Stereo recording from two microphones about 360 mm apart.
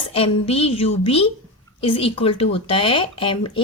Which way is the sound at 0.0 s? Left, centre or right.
Centre.